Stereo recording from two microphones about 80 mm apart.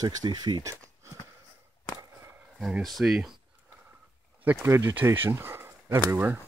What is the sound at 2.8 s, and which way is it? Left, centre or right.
Speech, centre.